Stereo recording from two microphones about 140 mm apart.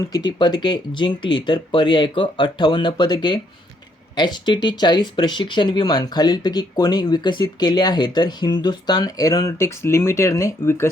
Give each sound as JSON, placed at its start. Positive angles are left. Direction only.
{"t": 0.1, "sound": "speech", "side_deg": 30}